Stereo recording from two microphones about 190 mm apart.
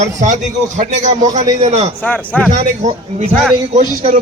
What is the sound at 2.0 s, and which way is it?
Speech, 5° left (ahead or behind).